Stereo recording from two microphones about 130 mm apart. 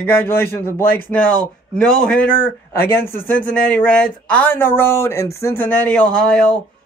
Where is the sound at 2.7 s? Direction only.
20° left (ahead or behind).